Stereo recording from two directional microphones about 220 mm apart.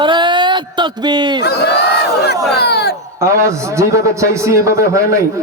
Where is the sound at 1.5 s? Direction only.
45° left (ahead or behind).